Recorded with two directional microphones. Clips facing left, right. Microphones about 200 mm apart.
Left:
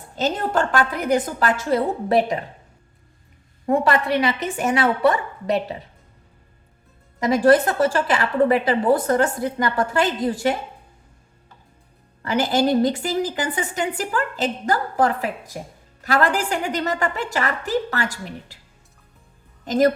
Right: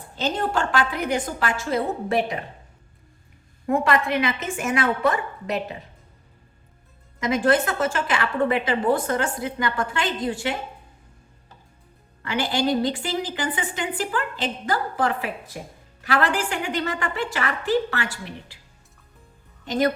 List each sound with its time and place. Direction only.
0.2 s a woman's voice: 45° left (ahead or behind)
3.7 s a woman's voice: 35° left (ahead or behind)
7.2 s a woman's voice: 35° left (ahead or behind)
12.2 s a woman's voice: 40° left (ahead or behind)
19.6 s a woman's voice: 40° left (ahead or behind)